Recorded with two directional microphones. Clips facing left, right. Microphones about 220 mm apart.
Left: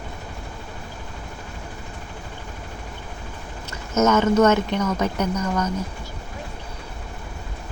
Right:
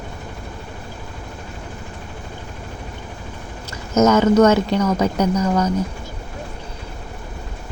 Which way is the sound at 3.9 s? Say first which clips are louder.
Right 4 dB; 35° right (ahead or behind).